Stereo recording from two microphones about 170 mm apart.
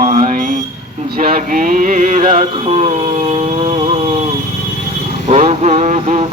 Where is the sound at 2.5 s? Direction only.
35° right (ahead or behind).